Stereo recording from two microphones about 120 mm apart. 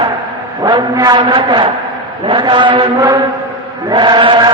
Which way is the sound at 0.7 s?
35° right (ahead or behind).